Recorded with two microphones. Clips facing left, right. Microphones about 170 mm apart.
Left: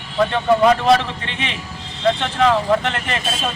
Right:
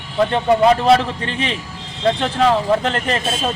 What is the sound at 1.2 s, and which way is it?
Speech, 35° right (ahead or behind).